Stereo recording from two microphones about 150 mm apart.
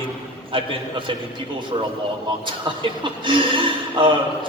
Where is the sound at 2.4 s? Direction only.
35° right (ahead or behind).